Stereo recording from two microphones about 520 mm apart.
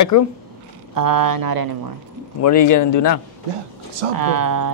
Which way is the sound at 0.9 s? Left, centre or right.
Right.